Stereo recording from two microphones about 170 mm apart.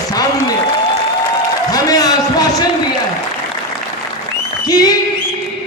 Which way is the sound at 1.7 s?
20° left (ahead or behind).